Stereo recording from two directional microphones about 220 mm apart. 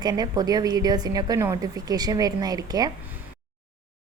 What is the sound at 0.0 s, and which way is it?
A woman's voice, 20° right (ahead or behind).